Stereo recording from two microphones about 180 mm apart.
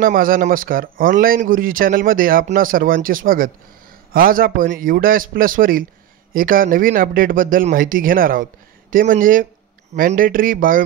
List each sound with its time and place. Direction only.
0.0 s speech: 50° right (ahead or behind)